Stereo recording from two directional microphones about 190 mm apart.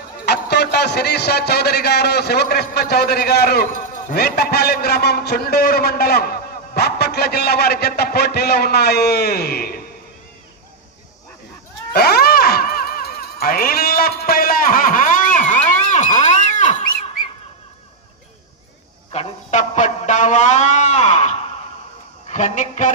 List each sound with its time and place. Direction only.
0.3 s speech: 60° left (ahead or behind)
11.9 s music: 55° left (ahead or behind)
19.1 s music: 35° left (ahead or behind)
22.3 s speech: 40° left (ahead or behind)